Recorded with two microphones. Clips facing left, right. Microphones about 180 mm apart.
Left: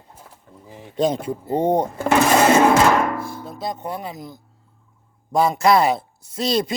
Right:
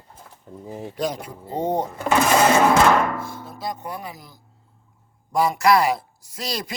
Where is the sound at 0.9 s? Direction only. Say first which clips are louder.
Left 8 dB; 25° left (ahead or behind).